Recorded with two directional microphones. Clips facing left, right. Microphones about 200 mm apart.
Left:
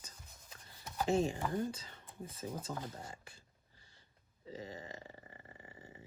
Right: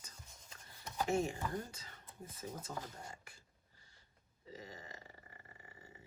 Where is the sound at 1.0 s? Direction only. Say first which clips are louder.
Left 3 dB; 30° left (ahead or behind).